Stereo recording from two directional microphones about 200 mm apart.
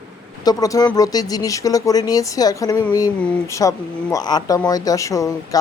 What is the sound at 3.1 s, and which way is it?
Speech, 5° left (ahead or behind).